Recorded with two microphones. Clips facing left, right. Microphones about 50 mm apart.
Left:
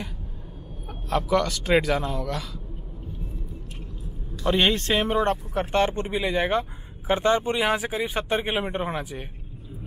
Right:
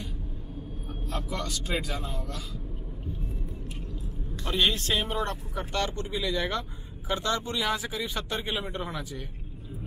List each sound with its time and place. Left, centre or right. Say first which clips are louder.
1.1 s speech: left 12 dB; left
4.5 s speech: left 5 dB; left